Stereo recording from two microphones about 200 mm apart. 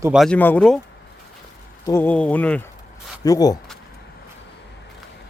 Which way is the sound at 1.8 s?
10° left (ahead or behind).